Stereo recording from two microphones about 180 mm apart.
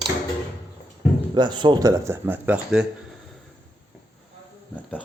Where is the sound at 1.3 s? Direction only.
25° right (ahead or behind); by 2.8 s 5° right (ahead or behind).